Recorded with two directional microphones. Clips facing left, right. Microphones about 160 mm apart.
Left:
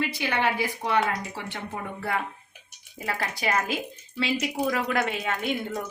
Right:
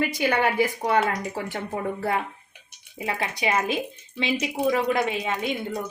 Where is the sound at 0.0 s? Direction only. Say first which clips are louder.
Right 4 dB; 45° right (ahead or behind).